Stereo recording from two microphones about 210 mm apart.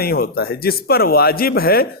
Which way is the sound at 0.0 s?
45° left (ahead or behind).